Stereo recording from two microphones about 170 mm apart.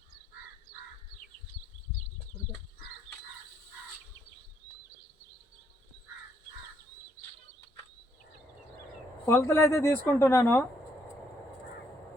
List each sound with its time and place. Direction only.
9.2 s speech: 15° left (ahead or behind)